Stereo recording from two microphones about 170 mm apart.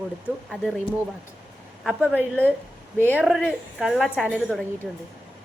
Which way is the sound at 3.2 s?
5° right (ahead or behind).